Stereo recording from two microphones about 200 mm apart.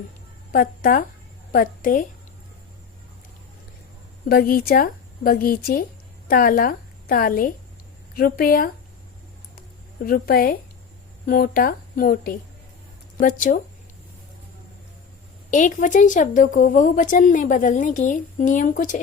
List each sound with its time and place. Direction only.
0.5 s speech: 45° left (ahead or behind)
4.3 s a woman's voice: 50° left (ahead or behind)
10.1 s speech: 50° left (ahead or behind)
15.4 s a woman's voice: 40° left (ahead or behind)